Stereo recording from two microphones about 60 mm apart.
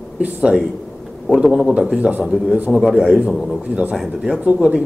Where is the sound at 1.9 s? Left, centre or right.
Centre.